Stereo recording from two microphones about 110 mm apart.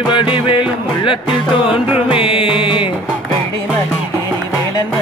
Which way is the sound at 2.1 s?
50° left (ahead or behind).